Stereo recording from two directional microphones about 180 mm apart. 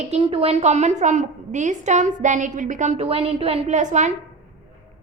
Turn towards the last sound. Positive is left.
turn(degrees=-40)  # may be behind; listen again after turning